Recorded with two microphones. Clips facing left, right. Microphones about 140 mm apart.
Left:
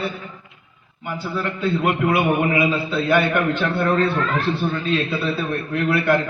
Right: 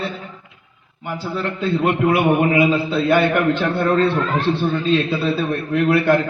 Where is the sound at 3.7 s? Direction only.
Centre (ahead or behind).